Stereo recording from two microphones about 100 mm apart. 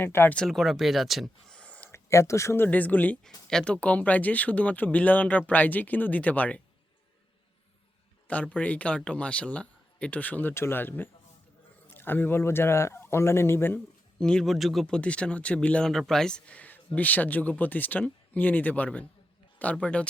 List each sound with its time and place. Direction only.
0.0 s speech: 20° left (ahead or behind)
0.3 s speech: 5° left (ahead or behind)
1.5 s a sound: 15° left (ahead or behind)
1.9 s speech: 30° left (ahead or behind)
8.3 s speech: 15° left (ahead or behind)
14.2 s speech: 5° left (ahead or behind)